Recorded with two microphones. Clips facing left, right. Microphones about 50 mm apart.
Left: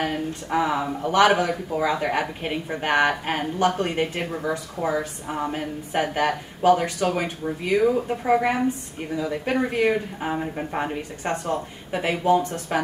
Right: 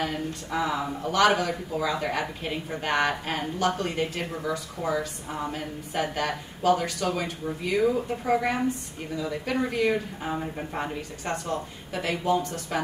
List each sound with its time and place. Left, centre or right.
0.0 s a woman's voice: left
10.3 s a woman's voice: centre